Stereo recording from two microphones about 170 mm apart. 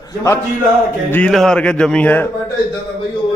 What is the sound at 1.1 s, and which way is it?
Speech, 5° left (ahead or behind).